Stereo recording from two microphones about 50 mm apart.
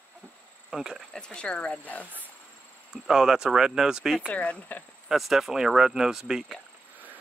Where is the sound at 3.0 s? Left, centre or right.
Centre.